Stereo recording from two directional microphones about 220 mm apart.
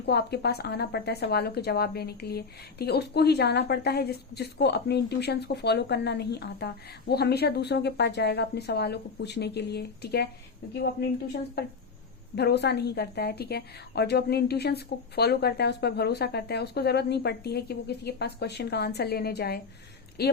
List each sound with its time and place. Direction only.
0.0 s speech: 50° left (ahead or behind)
12.4 s speech: 50° left (ahead or behind)